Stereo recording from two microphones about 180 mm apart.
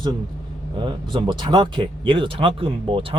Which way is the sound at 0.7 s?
25° right (ahead or behind).